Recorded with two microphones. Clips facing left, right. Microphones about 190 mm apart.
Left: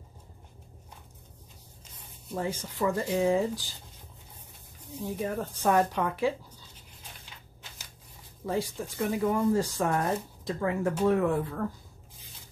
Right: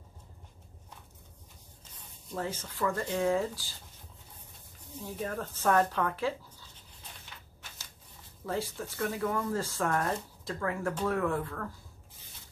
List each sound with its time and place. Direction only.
2.3 s speech: 15° left (ahead or behind)
5.0 s speech: 15° left (ahead or behind)
8.5 s speech: 15° left (ahead or behind)